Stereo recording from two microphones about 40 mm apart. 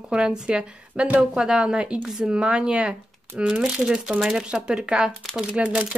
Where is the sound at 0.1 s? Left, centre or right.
Right.